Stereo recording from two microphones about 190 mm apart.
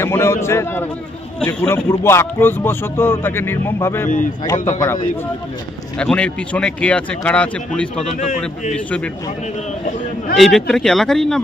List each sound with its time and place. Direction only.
0.0 s a man's voice: 15° left (ahead or behind)
5.9 s speech: 5° left (ahead or behind)
8.0 s a man's voice: 40° left (ahead or behind)
8.7 s speech: 5° left (ahead or behind)
10.3 s speech: centre (ahead or behind)